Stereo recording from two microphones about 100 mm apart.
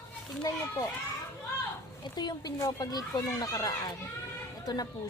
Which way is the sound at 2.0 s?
45° left (ahead or behind).